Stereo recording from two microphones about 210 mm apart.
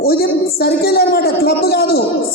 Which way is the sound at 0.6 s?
50° left (ahead or behind).